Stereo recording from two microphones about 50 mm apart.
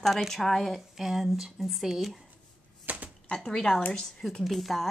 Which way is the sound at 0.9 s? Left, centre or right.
Centre.